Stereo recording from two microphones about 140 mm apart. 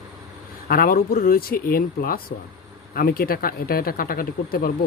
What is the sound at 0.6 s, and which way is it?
Speech, 90° left.